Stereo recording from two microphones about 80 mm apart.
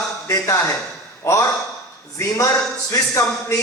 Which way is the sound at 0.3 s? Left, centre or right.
Left.